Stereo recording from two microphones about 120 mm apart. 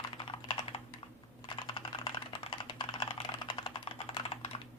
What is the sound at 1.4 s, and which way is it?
Typing, 40° left (ahead or behind).